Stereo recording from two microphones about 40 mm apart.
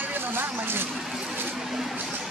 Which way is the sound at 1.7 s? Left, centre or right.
Centre.